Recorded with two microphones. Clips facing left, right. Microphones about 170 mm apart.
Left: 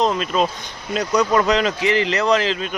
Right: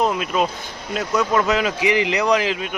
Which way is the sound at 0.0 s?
10° right (ahead or behind).